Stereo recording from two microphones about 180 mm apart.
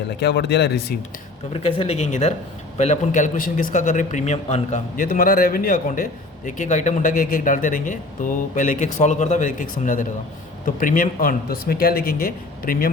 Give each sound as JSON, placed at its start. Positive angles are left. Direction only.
{"t": 0.2, "sound": "speech", "side_deg": 70}
{"t": 1.5, "sound": "a man's voice", "side_deg": 35}